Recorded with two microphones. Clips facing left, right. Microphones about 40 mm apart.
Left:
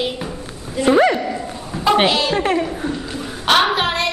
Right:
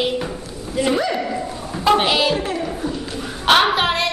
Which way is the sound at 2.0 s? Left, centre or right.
Centre.